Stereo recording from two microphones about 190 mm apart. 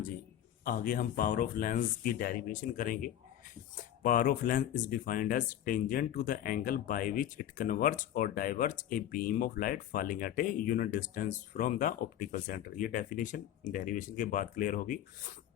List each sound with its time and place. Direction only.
0.6 s speech: 50° left (ahead or behind)